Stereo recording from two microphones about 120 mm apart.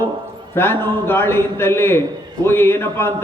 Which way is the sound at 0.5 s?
20° left (ahead or behind).